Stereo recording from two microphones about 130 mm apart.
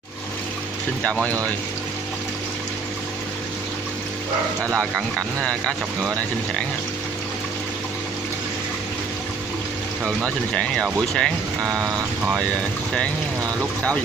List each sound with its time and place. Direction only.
4.7 s speech: 5° left (ahead or behind)
10.0 s speech: 5° left (ahead or behind)
11.6 s vehicle: 25° right (ahead or behind)